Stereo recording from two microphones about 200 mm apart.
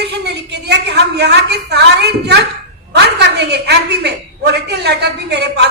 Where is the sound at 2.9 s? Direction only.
55° right (ahead or behind).